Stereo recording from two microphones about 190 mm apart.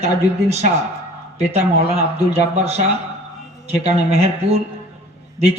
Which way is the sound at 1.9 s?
35° right (ahead or behind).